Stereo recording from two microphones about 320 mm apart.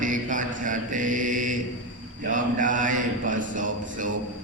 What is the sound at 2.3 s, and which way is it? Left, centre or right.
Mantra, right.